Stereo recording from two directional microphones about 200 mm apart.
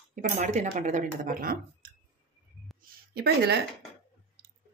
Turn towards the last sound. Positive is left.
turn(degrees=-55)  # may be behind; listen again after turning